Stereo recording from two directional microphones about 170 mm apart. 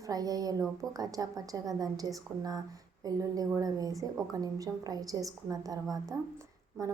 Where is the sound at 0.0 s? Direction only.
20° right (ahead or behind).